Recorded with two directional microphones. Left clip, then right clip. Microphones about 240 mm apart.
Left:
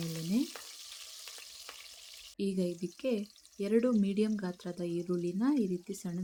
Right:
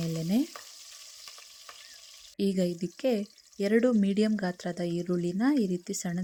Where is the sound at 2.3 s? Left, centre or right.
Right.